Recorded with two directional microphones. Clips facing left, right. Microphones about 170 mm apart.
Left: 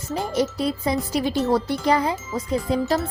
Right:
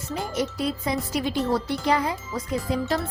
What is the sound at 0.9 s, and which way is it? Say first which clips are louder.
Speech: left 3 dB; 35° left (ahead or behind).